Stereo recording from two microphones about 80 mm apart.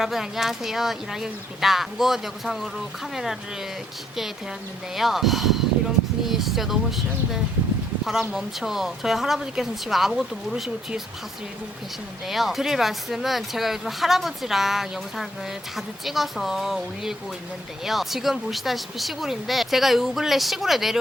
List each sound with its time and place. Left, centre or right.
0.0 s speech: centre
4.9 s speech: centre
12.3 s speech: centre